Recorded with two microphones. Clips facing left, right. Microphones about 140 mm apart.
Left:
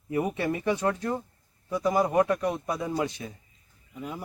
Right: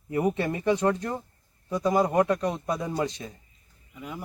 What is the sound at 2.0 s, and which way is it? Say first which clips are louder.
Speech: even; 5° left (ahead or behind).